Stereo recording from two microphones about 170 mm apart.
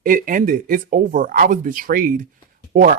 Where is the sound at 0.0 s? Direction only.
55° right (ahead or behind).